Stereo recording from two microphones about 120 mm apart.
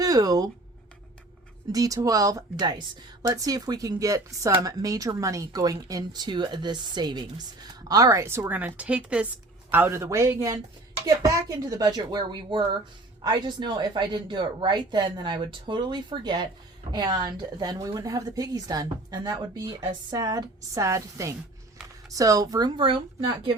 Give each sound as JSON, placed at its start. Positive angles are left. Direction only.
{"t": 0.0, "sound": "speech", "side_deg": -30}
{"t": 1.7, "sound": "a woman's voice", "side_deg": -30}
{"t": 22.8, "sound": "a woman's voice", "side_deg": -45}